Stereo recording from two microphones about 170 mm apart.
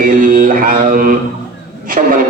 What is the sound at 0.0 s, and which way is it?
Mantra, 55° right (ahead or behind).